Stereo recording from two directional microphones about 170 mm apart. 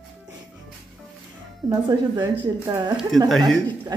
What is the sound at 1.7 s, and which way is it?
Speech, 25° right (ahead or behind).